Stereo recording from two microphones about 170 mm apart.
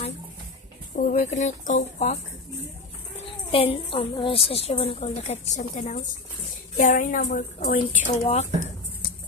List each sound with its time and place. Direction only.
0.9 s speech: 50° left (ahead or behind)
3.5 s a woman's voice: 35° left (ahead or behind); by 7.8 s 55° left (ahead or behind)
8.1 s a woman's voice: 40° left (ahead or behind)